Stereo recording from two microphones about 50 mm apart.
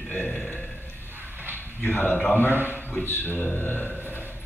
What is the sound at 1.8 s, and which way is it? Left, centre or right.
Speech, left.